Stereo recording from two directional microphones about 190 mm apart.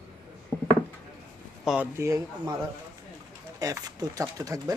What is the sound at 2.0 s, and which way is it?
Speech, 15° right (ahead or behind).